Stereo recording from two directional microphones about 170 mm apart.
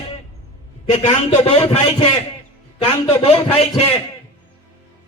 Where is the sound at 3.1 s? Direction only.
35° left (ahead or behind).